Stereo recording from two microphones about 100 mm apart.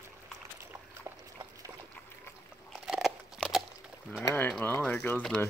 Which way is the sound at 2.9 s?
Centre (ahead or behind).